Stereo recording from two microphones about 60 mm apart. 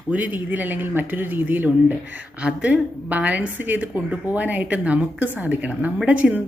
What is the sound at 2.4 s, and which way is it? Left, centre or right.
A woman's voice, right.